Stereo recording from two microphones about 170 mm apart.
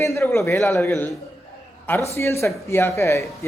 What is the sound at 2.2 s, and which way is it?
Speech, 15° left (ahead or behind).